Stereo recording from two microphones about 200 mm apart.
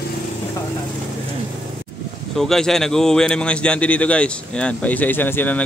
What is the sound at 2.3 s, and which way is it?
A man's voice, centre (ahead or behind).